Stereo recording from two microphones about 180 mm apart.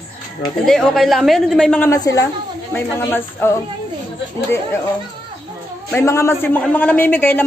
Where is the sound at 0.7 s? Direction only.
Centre (ahead or behind).